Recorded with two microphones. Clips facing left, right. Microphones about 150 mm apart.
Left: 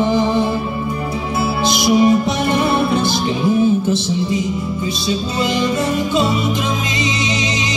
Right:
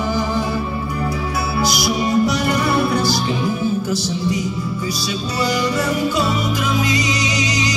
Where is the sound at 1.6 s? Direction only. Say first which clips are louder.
Left 7 dB; 25° left (ahead or behind).